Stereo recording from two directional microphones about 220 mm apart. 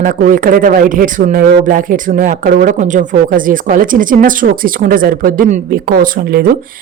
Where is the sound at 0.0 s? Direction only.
40° right (ahead or behind).